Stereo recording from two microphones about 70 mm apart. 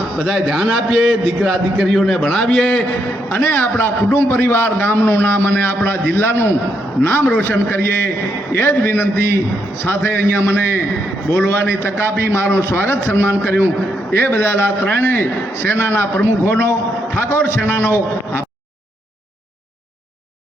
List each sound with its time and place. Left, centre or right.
0.2 s a man's voice: centre
3.2 s a man's voice: left